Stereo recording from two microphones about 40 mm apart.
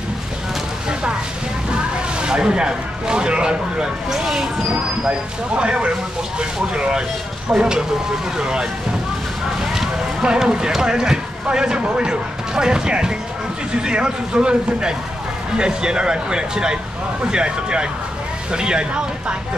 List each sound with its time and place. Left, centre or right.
1.7 s speech: right
5.5 s speech: right
9.6 s a sound: centre
10.3 s speech: right